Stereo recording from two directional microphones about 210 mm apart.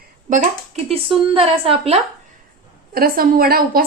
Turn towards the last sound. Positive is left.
turn(degrees=-45)  # may be behind; listen again after turning